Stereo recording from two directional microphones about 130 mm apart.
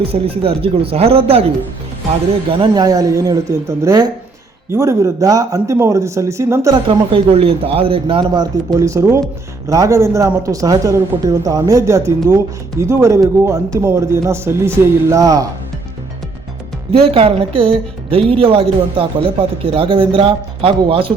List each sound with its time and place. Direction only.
0.1 s speech: 45° right (ahead or behind)
2.7 s a man's voice: 30° right (ahead or behind)
6.7 s speech: 40° right (ahead or behind)
8.3 s a man's voice: 30° right (ahead or behind)
16.9 s speech: 45° right (ahead or behind)